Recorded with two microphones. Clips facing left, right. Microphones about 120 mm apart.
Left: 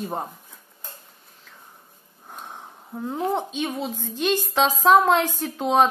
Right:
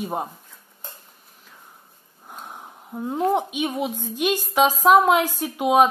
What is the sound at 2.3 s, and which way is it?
A woman's voice, 5° right (ahead or behind).